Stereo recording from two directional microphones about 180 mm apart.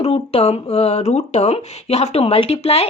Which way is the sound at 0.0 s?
35° left (ahead or behind).